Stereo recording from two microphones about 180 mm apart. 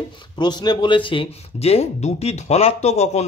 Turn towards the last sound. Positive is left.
turn(degrees=40)  # may be behind; listen again after turning